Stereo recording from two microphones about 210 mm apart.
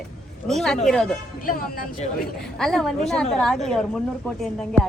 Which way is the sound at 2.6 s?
Centre (ahead or behind).